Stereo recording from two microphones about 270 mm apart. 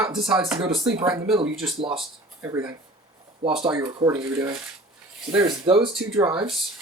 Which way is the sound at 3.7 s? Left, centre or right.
Centre.